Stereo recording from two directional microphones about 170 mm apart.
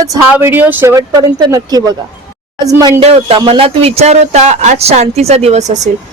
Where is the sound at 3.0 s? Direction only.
35° right (ahead or behind).